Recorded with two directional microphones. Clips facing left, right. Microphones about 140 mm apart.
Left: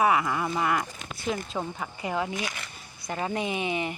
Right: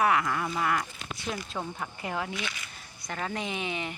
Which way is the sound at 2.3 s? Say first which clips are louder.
Left 3 dB; 45° left (ahead or behind).